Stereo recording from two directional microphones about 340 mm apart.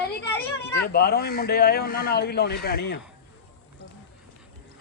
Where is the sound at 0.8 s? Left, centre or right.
Left.